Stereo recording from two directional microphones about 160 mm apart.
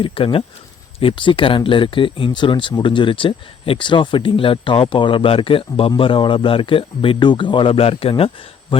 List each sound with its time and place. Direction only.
0.0 s speech: 35° left (ahead or behind)